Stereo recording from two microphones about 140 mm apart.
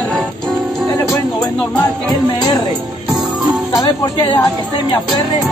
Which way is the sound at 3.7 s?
25° left (ahead or behind).